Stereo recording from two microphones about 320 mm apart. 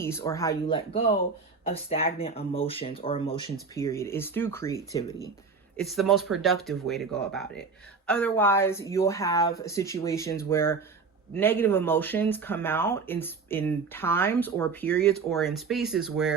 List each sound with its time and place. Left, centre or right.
0.0 s speech: centre